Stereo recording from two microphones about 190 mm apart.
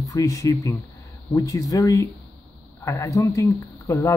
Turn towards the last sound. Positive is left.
turn(degrees=15)  # may be behind; listen again after turning